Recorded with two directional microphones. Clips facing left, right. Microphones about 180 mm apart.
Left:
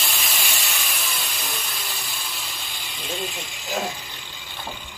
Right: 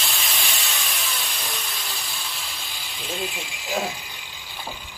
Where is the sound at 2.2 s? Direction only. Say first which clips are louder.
Even; centre (ahead or behind).